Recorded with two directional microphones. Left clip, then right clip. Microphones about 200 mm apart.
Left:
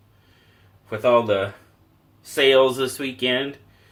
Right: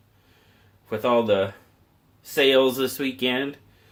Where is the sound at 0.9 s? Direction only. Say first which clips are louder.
Left 3 dB; 40° right (ahead or behind).